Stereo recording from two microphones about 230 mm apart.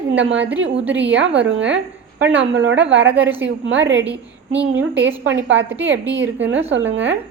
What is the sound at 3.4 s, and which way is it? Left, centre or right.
A woman's voice, right.